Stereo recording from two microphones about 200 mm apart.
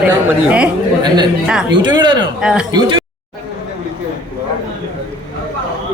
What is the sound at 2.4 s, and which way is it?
Speech, 5° right (ahead or behind).